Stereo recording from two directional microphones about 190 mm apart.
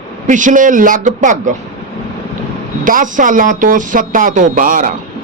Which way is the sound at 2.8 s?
45° right (ahead or behind).